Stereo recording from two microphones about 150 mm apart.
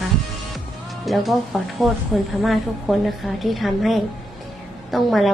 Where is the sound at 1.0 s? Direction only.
Centre (ahead or behind).